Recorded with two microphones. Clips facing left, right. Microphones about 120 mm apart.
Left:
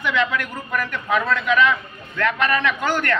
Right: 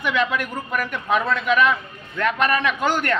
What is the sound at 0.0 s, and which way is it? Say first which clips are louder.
A man's voice: even; 15° right (ahead or behind).